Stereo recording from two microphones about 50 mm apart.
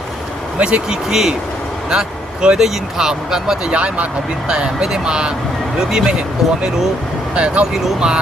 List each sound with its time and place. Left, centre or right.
0.6 s speech: right
1.1 s speech: centre
3.7 s speech: right
7.3 s speech: right